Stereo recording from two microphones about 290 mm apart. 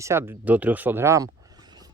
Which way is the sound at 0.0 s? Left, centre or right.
Centre.